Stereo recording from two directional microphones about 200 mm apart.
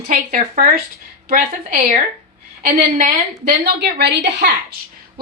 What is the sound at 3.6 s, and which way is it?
Speech, 55° right (ahead or behind).